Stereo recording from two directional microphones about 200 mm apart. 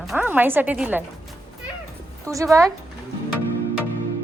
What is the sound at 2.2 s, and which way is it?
Speech, 15° right (ahead or behind).